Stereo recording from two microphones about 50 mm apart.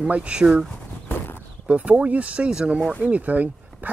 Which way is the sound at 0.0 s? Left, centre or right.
Right.